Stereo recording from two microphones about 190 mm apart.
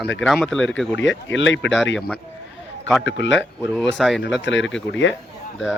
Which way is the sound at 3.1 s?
75° left (ahead or behind).